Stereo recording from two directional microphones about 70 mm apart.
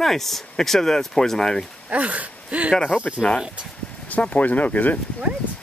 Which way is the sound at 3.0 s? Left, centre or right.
Centre.